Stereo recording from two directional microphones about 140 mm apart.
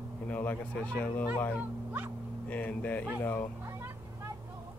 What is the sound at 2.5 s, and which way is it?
Speech, 10° left (ahead or behind).